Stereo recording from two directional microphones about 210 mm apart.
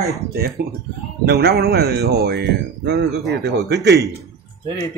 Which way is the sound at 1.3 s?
50° right (ahead or behind).